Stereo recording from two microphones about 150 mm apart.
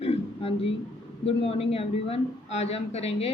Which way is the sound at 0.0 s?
40° left (ahead or behind).